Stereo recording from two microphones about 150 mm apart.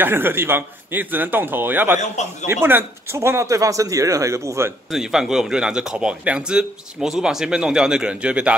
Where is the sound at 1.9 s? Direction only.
50° left (ahead or behind).